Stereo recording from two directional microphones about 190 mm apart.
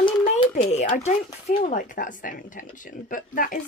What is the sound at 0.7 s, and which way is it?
Speech, 35° left (ahead or behind).